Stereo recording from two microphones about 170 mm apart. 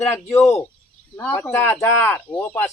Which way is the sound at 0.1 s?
15° left (ahead or behind).